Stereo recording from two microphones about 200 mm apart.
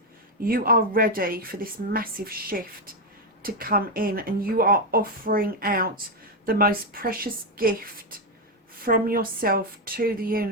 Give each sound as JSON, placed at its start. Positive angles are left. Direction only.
{"t": 0.4, "sound": "speech", "side_deg": -45}
{"t": 8.8, "sound": "speech", "side_deg": -45}